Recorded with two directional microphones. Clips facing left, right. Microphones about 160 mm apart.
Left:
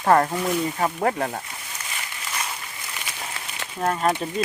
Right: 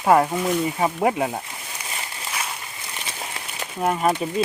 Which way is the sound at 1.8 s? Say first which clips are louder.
Right 3 dB; 30° right (ahead or behind).